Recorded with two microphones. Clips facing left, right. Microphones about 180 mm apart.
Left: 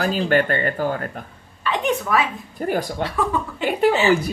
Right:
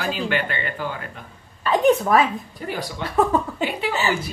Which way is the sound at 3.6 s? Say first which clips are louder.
Left 6 dB; 45° left (ahead or behind).